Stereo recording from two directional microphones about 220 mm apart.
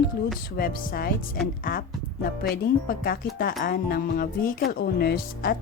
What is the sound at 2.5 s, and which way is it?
A woman's voice, 40° left (ahead or behind).